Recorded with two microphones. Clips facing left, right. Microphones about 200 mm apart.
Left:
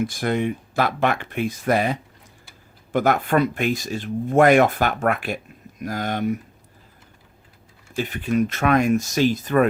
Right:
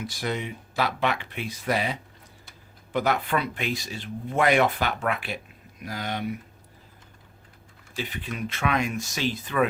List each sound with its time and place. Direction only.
0.0 s speech: 50° left (ahead or behind)
7.9 s speech: 45° left (ahead or behind)